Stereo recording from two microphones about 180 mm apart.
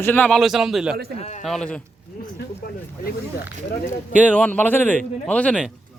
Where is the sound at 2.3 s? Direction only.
55° left (ahead or behind).